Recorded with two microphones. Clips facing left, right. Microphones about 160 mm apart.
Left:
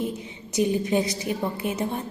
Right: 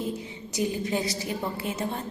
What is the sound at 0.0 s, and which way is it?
A woman's voice, 20° left (ahead or behind).